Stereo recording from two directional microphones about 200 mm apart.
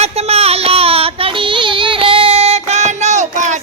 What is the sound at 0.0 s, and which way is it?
Child singing, 30° right (ahead or behind).